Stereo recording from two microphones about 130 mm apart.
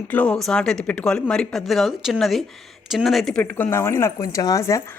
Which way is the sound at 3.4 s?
15° left (ahead or behind).